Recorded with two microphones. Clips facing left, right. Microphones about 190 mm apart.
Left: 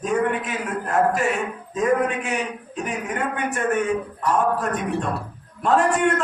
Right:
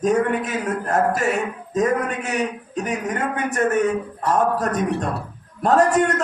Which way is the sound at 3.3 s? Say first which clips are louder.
Right 3 dB; 40° right (ahead or behind).